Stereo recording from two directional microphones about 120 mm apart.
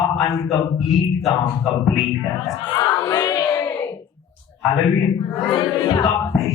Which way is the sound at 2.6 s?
35° left (ahead or behind).